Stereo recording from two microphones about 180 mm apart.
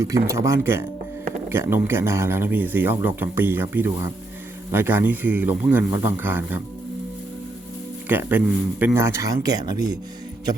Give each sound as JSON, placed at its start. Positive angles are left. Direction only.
{"t": 0.0, "sound": "speech", "side_deg": -15}
{"t": 8.0, "sound": "speech", "side_deg": -10}